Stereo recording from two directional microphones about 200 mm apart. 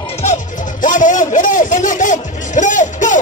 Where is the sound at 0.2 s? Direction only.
40° left (ahead or behind).